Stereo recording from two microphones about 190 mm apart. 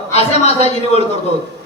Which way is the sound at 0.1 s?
35° left (ahead or behind).